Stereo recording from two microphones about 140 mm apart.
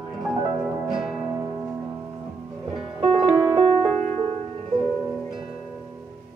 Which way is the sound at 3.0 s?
45° right (ahead or behind).